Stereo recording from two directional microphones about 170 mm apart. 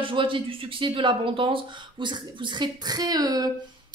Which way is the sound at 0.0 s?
30° right (ahead or behind).